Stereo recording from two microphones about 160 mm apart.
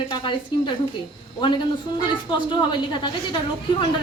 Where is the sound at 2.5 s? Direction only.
30° left (ahead or behind).